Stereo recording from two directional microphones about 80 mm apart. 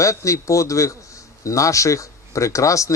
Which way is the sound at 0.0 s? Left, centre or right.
Left.